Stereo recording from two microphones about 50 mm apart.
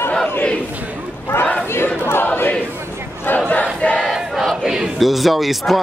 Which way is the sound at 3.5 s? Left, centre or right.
Left.